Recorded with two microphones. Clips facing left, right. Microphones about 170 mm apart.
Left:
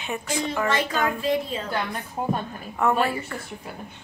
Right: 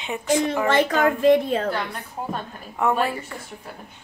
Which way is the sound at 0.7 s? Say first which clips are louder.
Right 5 dB; 55° right (ahead or behind).